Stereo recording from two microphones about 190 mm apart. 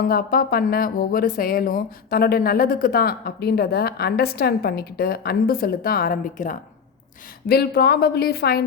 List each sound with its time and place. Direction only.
0.0 s speech: 50° left (ahead or behind)
7.4 s a woman's voice: 55° left (ahead or behind)